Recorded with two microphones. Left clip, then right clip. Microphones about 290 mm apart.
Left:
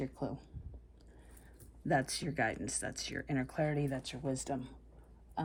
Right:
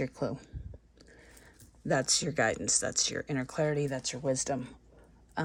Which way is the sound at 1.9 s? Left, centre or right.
Centre.